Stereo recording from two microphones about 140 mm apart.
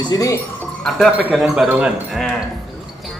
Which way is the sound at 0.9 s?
5° right (ahead or behind).